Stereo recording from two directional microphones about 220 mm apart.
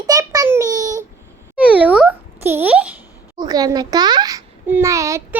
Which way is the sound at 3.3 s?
15° right (ahead or behind).